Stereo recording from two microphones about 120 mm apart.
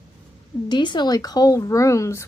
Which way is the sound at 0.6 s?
40° left (ahead or behind).